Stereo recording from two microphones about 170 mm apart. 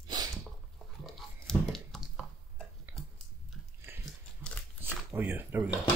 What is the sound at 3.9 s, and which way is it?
Dog, 15° right (ahead or behind).